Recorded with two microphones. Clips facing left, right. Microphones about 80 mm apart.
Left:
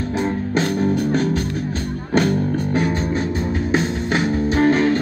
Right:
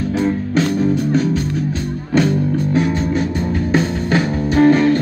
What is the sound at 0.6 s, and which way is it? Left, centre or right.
Music, left.